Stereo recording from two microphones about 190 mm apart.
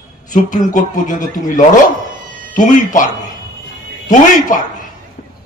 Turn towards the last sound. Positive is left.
turn(degrees=45)  # may be behind; listen again after turning